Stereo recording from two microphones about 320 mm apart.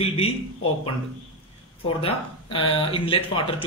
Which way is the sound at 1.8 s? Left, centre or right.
Centre.